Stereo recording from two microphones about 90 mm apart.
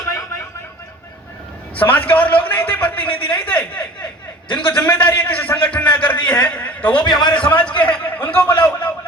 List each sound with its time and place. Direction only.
0.1 s a sound: 35° left (ahead or behind)
1.7 s a man's voice: 20° left (ahead or behind)
7.0 s a man's voice: 55° left (ahead or behind)
7.8 s a man's voice: 15° left (ahead or behind)